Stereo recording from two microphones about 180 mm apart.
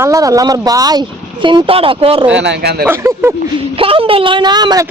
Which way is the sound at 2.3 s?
80° right.